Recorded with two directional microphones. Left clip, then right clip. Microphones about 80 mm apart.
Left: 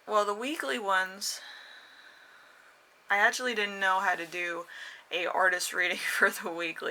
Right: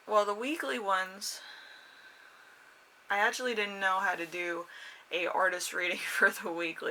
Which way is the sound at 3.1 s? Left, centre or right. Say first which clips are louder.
Left 3 dB; left.